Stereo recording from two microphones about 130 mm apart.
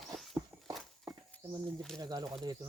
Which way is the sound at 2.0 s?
30° right (ahead or behind).